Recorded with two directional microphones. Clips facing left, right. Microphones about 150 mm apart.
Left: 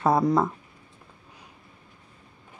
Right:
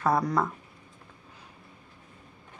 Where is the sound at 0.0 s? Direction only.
25° left (ahead or behind).